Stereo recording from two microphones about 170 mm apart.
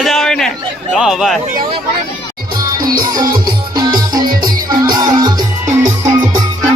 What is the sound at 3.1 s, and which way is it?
Music, 20° right (ahead or behind).